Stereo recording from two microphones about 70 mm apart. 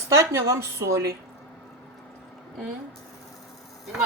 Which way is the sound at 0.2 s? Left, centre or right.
Right.